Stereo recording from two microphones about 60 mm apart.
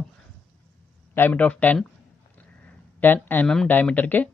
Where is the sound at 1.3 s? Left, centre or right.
Left.